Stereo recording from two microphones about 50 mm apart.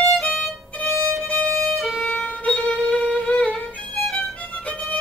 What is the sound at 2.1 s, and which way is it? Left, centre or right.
Music, left.